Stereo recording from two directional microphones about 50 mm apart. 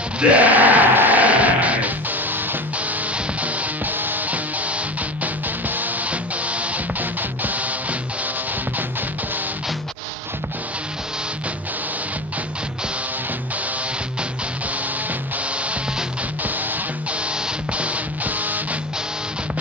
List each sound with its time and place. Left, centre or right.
0.2 s music: right
17.7 s music: right